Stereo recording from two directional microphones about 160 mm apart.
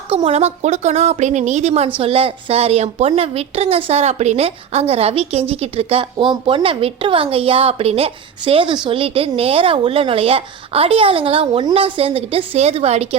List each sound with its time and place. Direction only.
0.1 s a woman's voice: 40° right (ahead or behind)